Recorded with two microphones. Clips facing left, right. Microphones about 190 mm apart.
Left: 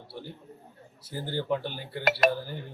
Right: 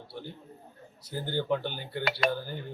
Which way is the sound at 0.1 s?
Centre (ahead or behind).